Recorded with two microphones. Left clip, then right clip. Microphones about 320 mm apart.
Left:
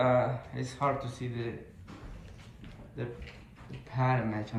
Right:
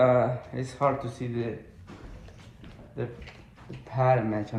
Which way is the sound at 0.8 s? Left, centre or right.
Centre.